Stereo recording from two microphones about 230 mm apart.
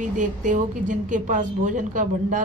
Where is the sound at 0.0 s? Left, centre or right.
Right.